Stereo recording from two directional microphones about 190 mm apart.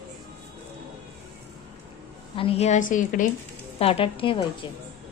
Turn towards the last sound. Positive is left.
turn(degrees=25)  # may be behind; listen again after turning